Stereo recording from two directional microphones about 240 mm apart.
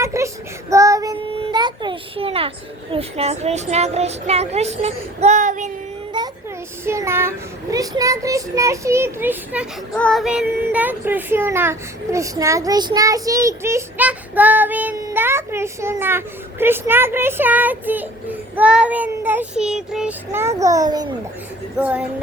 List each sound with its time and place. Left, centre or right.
0.0 s child singing: centre
2.9 s speech: right
6.2 s a sound: centre
6.8 s speech: centre
21.8 s speech: centre